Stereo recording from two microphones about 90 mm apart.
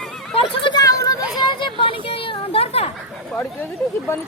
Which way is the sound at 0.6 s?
60° left (ahead or behind).